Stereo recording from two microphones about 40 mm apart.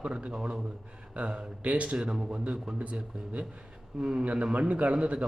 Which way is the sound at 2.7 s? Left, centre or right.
Centre.